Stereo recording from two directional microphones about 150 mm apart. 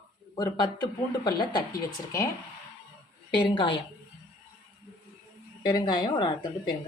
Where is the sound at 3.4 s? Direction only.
35° left (ahead or behind).